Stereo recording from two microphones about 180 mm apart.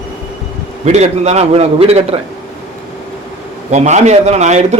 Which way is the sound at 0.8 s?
40° right (ahead or behind).